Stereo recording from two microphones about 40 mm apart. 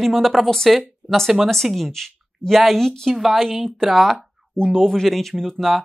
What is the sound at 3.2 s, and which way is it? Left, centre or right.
Speech, centre.